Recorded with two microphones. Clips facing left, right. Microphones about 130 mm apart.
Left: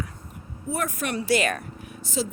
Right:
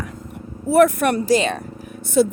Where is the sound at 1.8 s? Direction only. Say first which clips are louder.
Right 14 dB; 55° right (ahead or behind).